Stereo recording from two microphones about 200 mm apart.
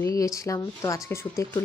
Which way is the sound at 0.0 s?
15° left (ahead or behind).